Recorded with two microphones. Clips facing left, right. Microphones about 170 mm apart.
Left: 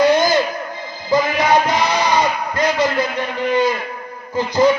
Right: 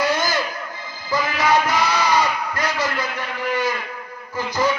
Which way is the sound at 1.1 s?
20° left (ahead or behind).